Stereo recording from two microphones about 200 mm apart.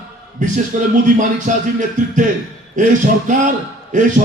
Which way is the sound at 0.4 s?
40° right (ahead or behind).